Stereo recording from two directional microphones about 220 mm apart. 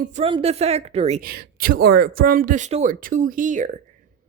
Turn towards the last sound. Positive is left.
turn(degrees=-35)  # may be behind; listen again after turning